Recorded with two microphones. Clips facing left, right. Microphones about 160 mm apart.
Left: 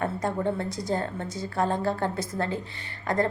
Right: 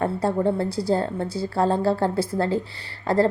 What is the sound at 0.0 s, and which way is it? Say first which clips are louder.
A woman's voice: right 5 dB; 30° right (ahead or behind).